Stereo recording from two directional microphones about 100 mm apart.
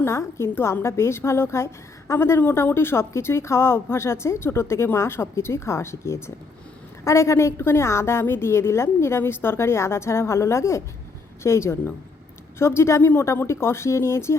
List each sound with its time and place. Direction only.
0.0 s a woman's voice: 25° left (ahead or behind)